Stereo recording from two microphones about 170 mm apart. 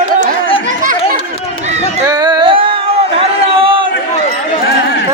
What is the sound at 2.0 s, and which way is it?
Music, 25° right (ahead or behind).